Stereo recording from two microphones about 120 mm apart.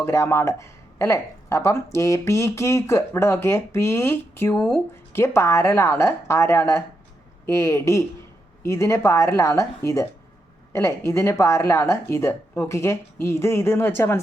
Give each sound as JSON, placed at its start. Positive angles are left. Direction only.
{"t": 0.0, "sound": "speech", "side_deg": 25}